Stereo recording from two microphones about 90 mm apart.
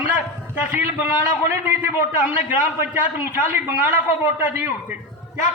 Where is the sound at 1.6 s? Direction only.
20° right (ahead or behind).